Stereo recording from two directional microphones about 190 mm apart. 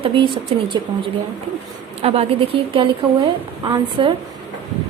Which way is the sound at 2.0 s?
30° right (ahead or behind).